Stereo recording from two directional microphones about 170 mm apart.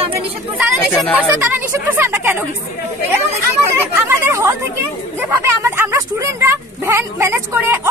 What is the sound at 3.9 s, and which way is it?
Chatter, 15° right (ahead or behind).